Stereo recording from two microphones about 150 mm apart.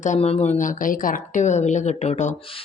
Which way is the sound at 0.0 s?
50° left (ahead or behind).